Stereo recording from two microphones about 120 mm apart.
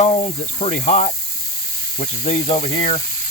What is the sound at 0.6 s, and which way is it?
Speech, 90° left.